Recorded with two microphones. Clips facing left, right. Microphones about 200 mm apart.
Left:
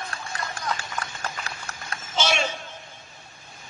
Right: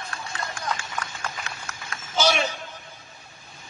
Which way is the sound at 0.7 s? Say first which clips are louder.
Even; 35° left (ahead or behind).